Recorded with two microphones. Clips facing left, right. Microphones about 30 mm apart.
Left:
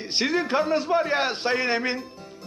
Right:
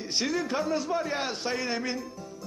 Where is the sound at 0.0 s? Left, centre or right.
Left.